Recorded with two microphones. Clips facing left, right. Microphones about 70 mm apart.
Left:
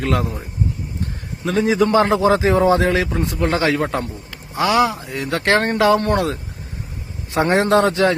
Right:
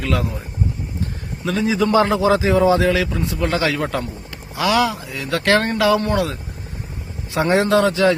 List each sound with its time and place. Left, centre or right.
0.0 s speech: left
1.5 s speech: left
4.5 s speech: left